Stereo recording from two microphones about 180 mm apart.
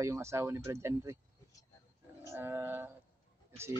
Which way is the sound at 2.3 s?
10° right (ahead or behind).